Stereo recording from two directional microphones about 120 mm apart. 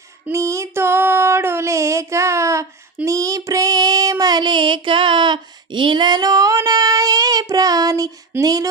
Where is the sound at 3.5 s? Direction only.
30° right (ahead or behind).